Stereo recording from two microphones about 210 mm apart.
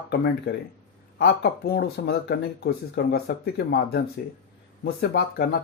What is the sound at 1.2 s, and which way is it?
Speech, 50° left (ahead or behind).